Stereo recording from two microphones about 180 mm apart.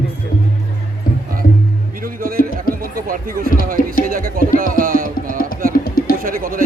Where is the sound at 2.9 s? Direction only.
50° right (ahead or behind).